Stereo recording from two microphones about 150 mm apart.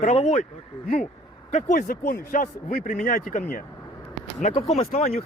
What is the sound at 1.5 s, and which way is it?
Speech, 50° left (ahead or behind).